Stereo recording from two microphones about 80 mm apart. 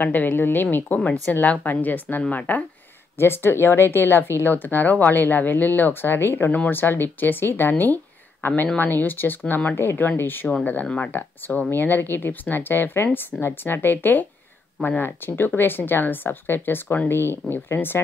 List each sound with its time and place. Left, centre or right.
0.0 s speech: left
15.0 s speech: left